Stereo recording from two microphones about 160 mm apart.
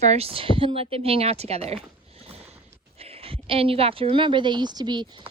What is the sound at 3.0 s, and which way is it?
Speech, 40° right (ahead or behind).